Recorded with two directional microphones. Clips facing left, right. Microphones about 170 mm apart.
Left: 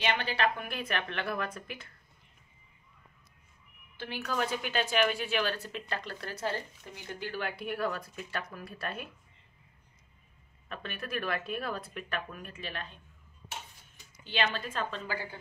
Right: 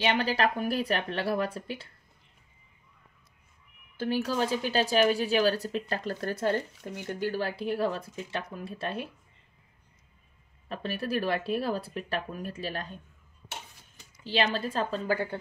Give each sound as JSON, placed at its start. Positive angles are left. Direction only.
{"t": 0.0, "sound": "a woman's voice", "side_deg": -35}
{"t": 3.9, "sound": "a woman's voice", "side_deg": -40}
{"t": 10.7, "sound": "a woman's voice", "side_deg": -35}
{"t": 14.2, "sound": "a woman's voice", "side_deg": -35}